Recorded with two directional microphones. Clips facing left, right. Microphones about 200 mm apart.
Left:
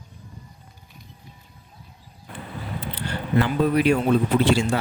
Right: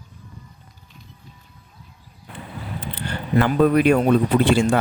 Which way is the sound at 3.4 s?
55° right (ahead or behind).